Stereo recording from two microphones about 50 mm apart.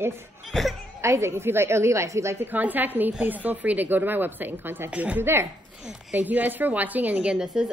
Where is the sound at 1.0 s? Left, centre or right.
Right.